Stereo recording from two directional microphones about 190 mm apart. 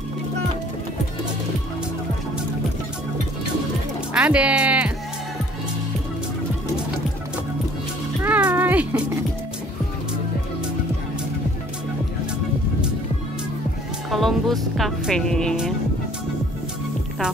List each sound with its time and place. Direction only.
4.1 s speech: 5° right (ahead or behind)
8.2 s cat: 10° right (ahead or behind)
14.1 s speech: centre (ahead or behind)